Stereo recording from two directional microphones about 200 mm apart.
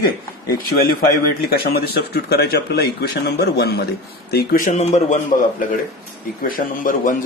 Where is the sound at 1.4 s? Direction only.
50° left (ahead or behind); by 5.2 s 35° left (ahead or behind).